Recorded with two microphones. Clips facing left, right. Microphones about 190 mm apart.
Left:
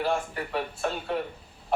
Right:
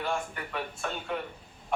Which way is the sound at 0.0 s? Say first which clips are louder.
Left 5 dB; 35° left (ahead or behind).